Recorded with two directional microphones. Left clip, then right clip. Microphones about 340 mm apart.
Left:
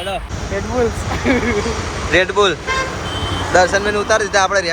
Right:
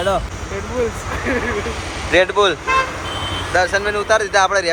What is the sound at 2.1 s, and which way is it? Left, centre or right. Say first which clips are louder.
Speech: even; centre.